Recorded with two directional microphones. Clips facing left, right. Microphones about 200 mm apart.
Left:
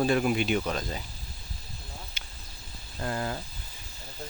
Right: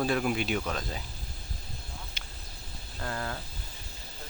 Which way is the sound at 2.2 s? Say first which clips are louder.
Right 1 dB; centre (ahead or behind).